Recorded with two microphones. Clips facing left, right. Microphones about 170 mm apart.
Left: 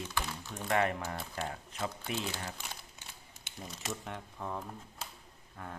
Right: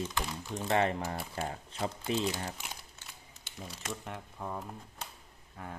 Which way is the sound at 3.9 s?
Centre (ahead or behind).